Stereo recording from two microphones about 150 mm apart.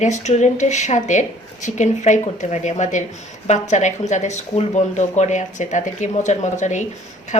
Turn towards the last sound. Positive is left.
turn(degrees=55)  # may be behind; listen again after turning